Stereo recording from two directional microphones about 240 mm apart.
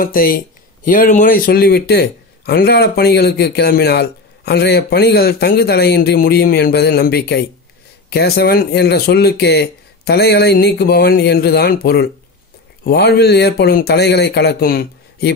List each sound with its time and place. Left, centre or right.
0.0 s a man's voice: left